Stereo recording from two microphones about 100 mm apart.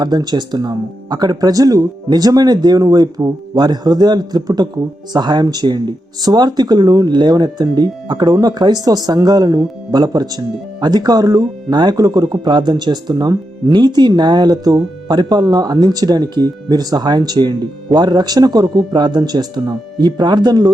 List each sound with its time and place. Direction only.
0.0 s speech: 45° right (ahead or behind)